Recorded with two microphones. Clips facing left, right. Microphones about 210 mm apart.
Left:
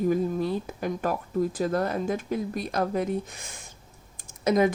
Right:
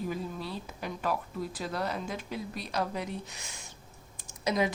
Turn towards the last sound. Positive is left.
turn(degrees=50)  # may be behind; listen again after turning